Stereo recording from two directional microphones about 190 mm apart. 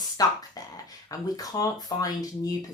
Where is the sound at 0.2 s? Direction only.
20° left (ahead or behind).